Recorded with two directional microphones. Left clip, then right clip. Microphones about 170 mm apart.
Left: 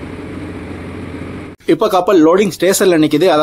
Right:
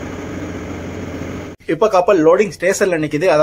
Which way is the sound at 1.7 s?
60° left (ahead or behind).